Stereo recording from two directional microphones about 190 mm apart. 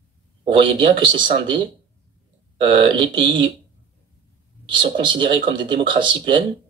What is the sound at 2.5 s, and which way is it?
Speech, 25° right (ahead or behind).